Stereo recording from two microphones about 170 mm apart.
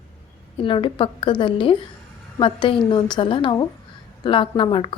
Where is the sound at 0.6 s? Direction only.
30° left (ahead or behind).